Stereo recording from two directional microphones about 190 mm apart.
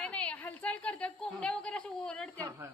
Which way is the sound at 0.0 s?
5° left (ahead or behind).